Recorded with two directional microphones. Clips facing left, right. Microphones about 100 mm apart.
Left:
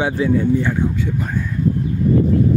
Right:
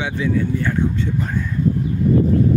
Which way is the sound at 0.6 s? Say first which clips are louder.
Left 1 dB; 10° left (ahead or behind).